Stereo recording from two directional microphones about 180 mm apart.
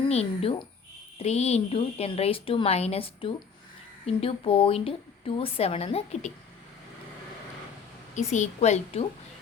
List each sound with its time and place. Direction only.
0.1 s a woman's voice: 35° left (ahead or behind)
8.1 s a woman's voice: 40° left (ahead or behind)